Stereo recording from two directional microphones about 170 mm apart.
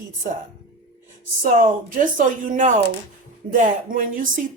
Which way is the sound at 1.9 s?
50° right (ahead or behind).